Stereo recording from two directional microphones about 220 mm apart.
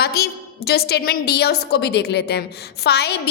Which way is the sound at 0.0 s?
45° left (ahead or behind).